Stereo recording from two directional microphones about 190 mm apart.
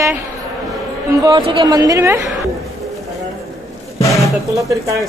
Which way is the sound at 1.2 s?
25° right (ahead or behind).